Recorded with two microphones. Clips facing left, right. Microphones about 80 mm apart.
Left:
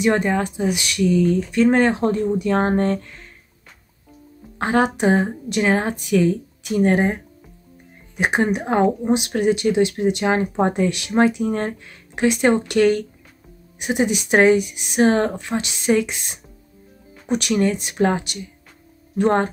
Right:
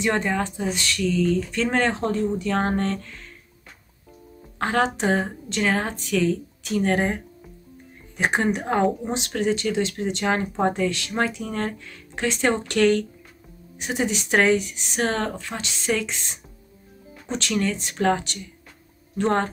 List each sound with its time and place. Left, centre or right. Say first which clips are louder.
0.0 s speech: left 4 dB; centre
4.6 s speech: left 4 dB; centre
7.1 s music: left 3 dB; centre
8.2 s speech: left 3 dB; centre